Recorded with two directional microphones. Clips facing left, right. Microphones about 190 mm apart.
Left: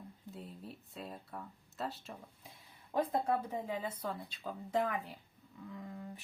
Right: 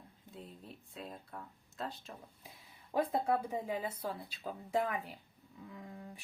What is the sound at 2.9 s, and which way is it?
Speech, 10° right (ahead or behind).